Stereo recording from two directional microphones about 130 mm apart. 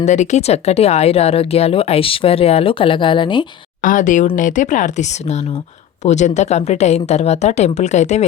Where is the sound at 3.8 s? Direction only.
85° left; by 8.2 s 60° left (ahead or behind).